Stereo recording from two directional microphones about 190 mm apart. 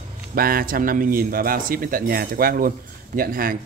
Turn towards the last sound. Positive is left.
turn(degrees=-50)  # may be behind; listen again after turning